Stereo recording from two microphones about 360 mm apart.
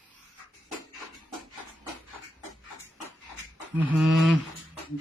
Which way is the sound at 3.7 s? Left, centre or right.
Centre.